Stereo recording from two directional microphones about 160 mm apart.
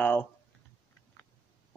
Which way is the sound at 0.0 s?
10° left (ahead or behind).